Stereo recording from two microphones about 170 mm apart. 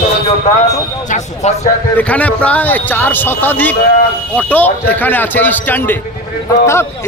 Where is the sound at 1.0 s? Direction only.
45° left (ahead or behind).